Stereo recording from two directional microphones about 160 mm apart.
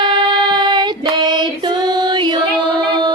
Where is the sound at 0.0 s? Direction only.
30° right (ahead or behind).